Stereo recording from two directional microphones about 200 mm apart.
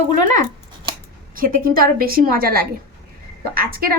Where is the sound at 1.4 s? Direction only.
45° right (ahead or behind).